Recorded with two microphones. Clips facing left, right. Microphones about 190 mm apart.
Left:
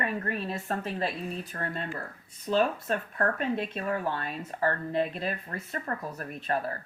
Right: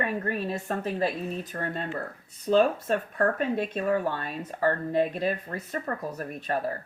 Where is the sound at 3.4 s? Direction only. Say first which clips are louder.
Right 3 dB; 45° right (ahead or behind).